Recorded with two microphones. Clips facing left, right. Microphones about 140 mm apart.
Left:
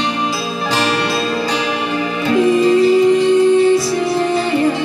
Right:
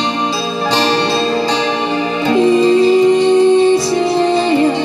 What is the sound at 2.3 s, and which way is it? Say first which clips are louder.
Music: right 2 dB; 25° right (ahead or behind).